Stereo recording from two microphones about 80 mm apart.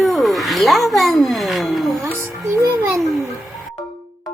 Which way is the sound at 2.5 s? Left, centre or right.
Right.